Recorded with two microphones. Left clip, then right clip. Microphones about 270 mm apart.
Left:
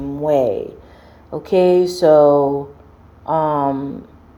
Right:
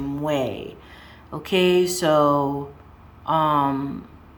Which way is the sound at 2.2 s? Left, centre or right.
Right.